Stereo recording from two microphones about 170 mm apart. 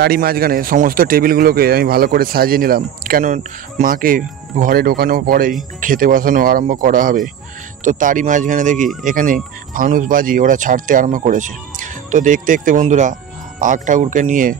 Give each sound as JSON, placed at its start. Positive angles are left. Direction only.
{"t": 0.0, "sound": "speech", "side_deg": -65}